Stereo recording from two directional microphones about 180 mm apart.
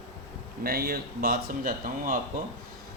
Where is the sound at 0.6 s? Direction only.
60° right (ahead or behind).